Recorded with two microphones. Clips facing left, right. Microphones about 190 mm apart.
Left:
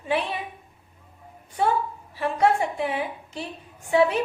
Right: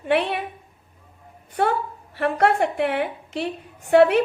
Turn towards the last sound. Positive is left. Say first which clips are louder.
# right 5 dB
turn(degrees=-65)  # may be behind; listen again after turning